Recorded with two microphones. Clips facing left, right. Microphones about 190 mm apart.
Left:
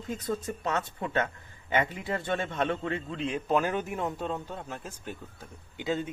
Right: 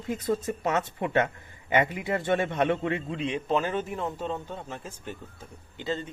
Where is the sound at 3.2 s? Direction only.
Centre (ahead or behind).